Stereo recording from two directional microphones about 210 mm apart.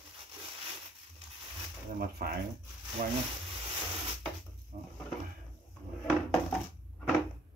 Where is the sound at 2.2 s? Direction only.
45° right (ahead or behind).